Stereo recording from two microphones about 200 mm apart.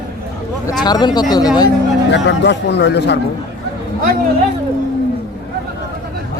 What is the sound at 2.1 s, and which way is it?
A man's voice, 60° left (ahead or behind).